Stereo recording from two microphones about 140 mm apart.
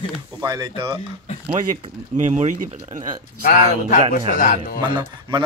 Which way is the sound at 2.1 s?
65° right (ahead or behind).